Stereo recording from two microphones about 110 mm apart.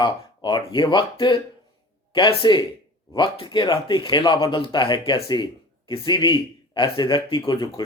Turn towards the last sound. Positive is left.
turn(degrees=40)  # may be behind; listen again after turning